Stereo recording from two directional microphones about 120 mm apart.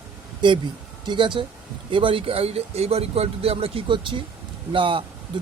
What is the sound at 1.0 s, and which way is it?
Speech, 40° right (ahead or behind).